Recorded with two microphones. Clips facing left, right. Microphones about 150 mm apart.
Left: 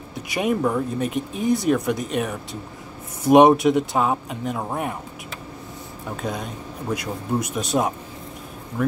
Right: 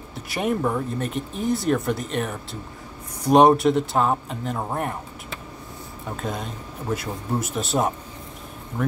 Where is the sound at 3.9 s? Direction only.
5° left (ahead or behind).